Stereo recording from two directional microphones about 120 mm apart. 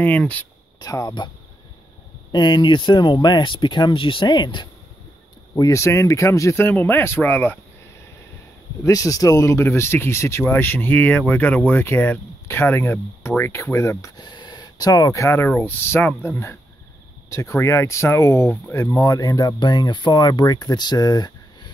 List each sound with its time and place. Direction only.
0.0 s speech: 15° left (ahead or behind)
0.7 s speech: 30° left (ahead or behind)
2.3 s speech: 40° left (ahead or behind)
5.5 s speech: 30° left (ahead or behind)
8.8 s speech: 30° left (ahead or behind)